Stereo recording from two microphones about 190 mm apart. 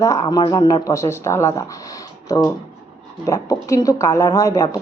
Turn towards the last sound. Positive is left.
turn(degrees=15)  # may be behind; listen again after turning